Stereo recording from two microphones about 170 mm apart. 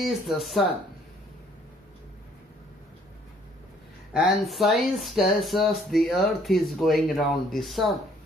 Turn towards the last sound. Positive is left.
turn(degrees=0)  # may be behind; listen again after turning